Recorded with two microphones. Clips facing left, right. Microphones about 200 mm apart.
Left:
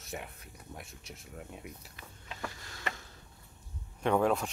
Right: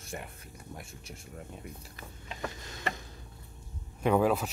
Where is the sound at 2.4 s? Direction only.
20° right (ahead or behind).